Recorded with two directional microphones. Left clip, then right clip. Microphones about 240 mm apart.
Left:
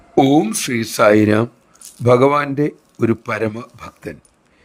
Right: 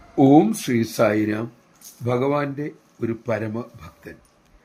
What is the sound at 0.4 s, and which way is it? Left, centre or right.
A man's voice, left.